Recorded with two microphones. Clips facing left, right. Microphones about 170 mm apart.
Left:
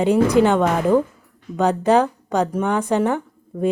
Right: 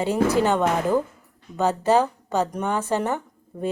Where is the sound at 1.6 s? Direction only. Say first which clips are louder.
Left 3 dB; 15° left (ahead or behind).